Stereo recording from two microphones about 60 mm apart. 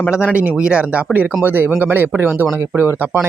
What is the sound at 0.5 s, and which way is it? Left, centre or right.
Speech, centre.